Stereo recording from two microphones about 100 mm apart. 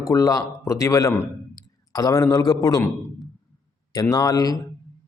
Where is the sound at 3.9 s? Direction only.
35° left (ahead or behind).